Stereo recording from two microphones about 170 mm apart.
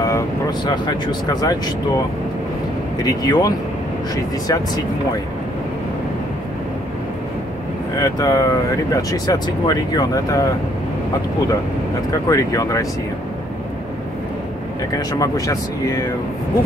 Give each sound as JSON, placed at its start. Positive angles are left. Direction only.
{"t": 0.0, "sound": "speech", "side_deg": 20}
{"t": 3.0, "sound": "speech", "side_deg": 20}
{"t": 8.0, "sound": "speech", "side_deg": 20}
{"t": 12.1, "sound": "speech", "side_deg": 20}
{"t": 15.0, "sound": "speech", "side_deg": 20}